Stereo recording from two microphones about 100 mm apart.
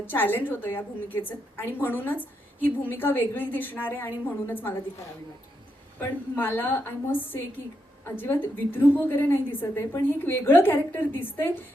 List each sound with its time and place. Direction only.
0.0 s a woman's voice: 20° left (ahead or behind)
6.0 s a woman's voice: 20° left (ahead or behind)